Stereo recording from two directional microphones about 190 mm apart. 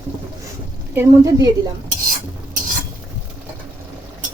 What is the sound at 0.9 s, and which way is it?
Speech, 15° right (ahead or behind).